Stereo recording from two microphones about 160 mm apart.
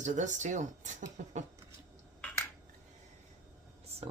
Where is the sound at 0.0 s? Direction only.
50° right (ahead or behind).